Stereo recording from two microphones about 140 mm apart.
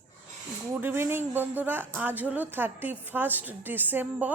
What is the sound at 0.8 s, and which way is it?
A woman's voice, 15° right (ahead or behind).